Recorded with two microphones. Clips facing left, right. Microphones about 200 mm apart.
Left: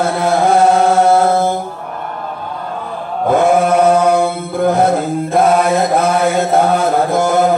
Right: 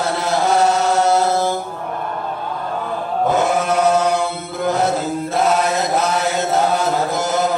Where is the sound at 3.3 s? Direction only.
55° left (ahead or behind).